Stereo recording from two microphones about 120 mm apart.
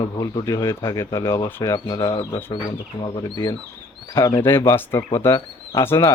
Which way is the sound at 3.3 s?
35° left (ahead or behind).